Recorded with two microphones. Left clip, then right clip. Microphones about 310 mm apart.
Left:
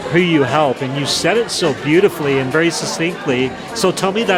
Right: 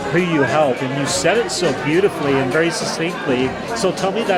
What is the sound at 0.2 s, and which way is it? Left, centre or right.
Speech, left.